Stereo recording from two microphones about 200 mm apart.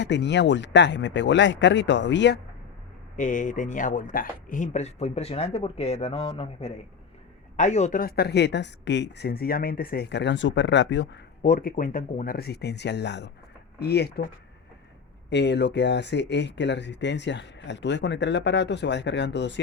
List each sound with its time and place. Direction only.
0.0 s speech: 60° left (ahead or behind)
3.2 s speech: 40° left (ahead or behind); by 11.2 s 65° left (ahead or behind)
11.4 s speech: 40° left (ahead or behind)
15.3 s speech: 60° left (ahead or behind)